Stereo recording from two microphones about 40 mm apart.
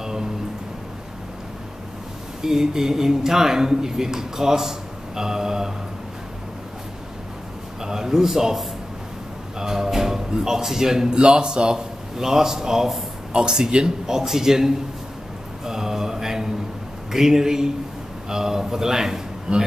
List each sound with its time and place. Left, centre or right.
0.0 s a sound: centre
2.4 s speech: centre
7.8 s speech: centre
9.6 s speech: centre
15.6 s mantra: centre
17.1 s a man's voice: centre